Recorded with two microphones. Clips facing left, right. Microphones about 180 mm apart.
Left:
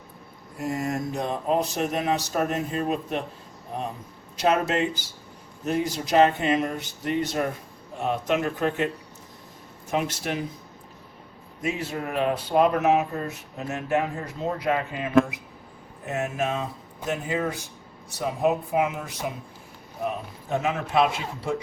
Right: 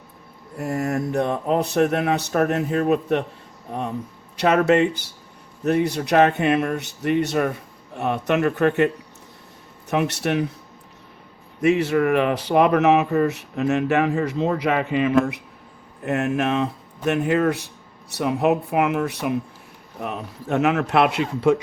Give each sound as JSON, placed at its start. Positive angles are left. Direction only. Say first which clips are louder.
{"t": 0.6, "sound": "mantra", "louder": "right 4 dB", "side_deg": -60}
{"t": 9.9, "sound": "speech", "louder": "right 6 dB", "side_deg": -65}
{"t": 11.6, "sound": "speech", "louder": "right 11 dB", "side_deg": -75}
{"t": 16.0, "sound": "speech", "louder": "right 6 dB", "side_deg": -70}